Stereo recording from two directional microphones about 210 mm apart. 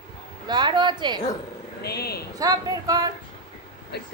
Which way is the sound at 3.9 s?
50° left (ahead or behind).